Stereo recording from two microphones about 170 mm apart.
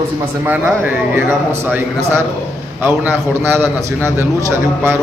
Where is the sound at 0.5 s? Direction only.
10° right (ahead or behind).